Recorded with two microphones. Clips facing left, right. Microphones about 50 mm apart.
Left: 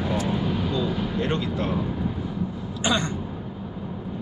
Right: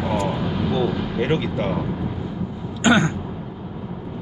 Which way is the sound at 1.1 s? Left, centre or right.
Right.